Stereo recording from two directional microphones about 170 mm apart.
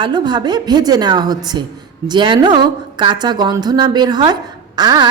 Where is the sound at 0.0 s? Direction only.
25° right (ahead or behind).